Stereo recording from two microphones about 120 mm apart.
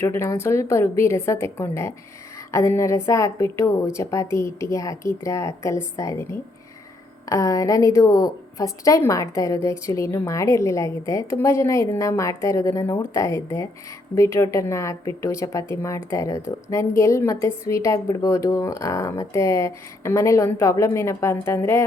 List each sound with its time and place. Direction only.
0.0 s speech: 20° left (ahead or behind)
7.3 s speech: 30° left (ahead or behind)